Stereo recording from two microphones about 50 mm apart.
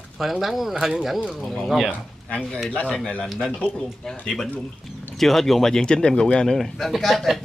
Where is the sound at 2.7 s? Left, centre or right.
Left.